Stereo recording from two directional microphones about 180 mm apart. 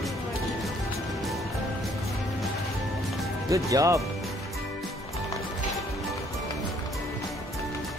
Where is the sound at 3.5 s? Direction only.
20° right (ahead or behind).